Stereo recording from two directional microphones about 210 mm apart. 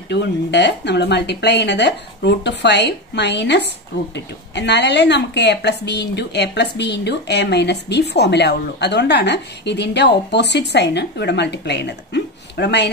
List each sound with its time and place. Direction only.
0.1 s speech: 55° left (ahead or behind)